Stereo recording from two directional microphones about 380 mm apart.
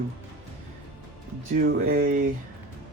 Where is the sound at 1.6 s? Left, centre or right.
Right.